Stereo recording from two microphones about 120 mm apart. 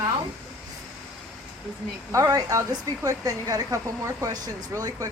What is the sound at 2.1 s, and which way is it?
Speech, 30° right (ahead or behind).